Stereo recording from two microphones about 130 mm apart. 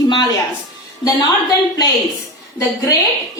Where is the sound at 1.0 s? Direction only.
30° left (ahead or behind).